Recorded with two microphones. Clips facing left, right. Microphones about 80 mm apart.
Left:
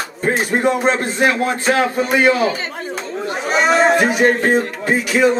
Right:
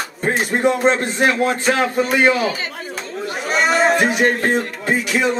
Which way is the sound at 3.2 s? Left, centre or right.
Centre.